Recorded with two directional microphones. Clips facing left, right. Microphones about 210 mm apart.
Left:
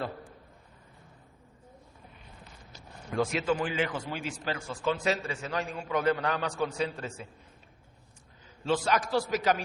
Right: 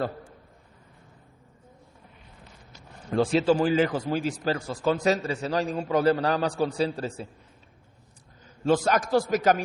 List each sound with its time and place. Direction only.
3.1 s speech: 30° right (ahead or behind)
8.6 s a man's voice: 45° right (ahead or behind)